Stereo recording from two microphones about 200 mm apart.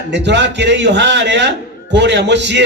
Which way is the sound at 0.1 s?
60° right (ahead or behind).